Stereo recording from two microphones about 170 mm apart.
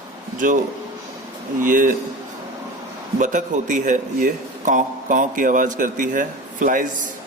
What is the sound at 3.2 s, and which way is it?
Speech, 50° right (ahead or behind).